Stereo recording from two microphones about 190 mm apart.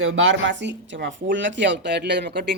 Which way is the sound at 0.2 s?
80° right.